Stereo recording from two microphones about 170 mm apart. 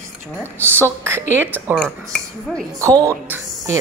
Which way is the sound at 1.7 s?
Centre (ahead or behind).